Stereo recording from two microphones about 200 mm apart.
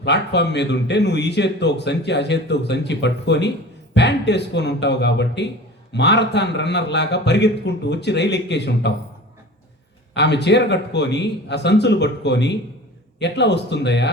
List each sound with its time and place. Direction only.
0.0 s a man's voice: 60° left (ahead or behind)
10.2 s a man's voice: 60° left (ahead or behind)